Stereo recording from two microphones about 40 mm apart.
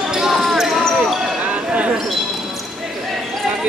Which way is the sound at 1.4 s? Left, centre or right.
Right.